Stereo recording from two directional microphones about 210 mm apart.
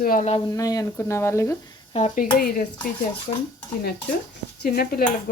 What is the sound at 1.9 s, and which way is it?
Speech, 30° left (ahead or behind).